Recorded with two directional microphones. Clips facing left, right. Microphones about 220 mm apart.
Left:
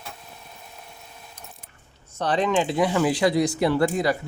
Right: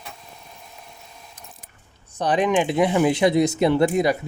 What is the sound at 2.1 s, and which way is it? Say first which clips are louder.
Speech: right 2 dB; 15° right (ahead or behind).